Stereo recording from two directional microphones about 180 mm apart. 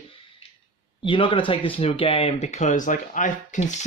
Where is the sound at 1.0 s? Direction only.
30° left (ahead or behind).